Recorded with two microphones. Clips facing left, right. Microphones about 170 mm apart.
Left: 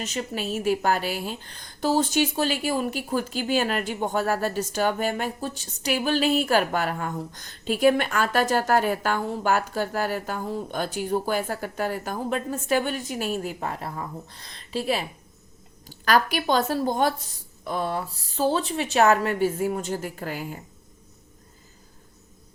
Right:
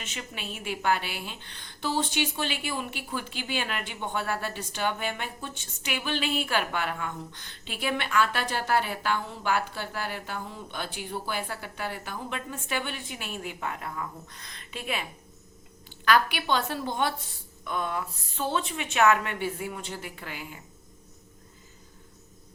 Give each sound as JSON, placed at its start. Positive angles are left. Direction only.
{"t": 0.0, "sound": "a woman's voice", "side_deg": 40}